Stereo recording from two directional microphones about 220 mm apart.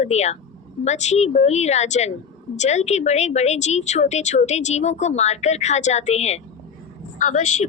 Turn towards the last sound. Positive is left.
turn(degrees=30)  # may be behind; listen again after turning